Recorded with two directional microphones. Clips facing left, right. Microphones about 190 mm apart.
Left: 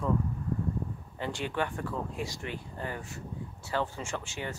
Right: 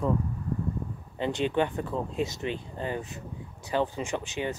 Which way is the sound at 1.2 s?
20° right (ahead or behind).